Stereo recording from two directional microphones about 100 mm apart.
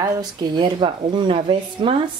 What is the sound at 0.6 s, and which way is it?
Speech, 55° right (ahead or behind).